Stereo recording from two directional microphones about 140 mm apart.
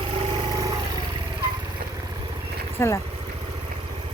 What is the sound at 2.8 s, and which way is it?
Speech, 20° left (ahead or behind).